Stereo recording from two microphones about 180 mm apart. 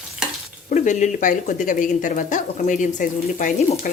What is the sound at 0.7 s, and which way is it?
Speech, 45° left (ahead or behind).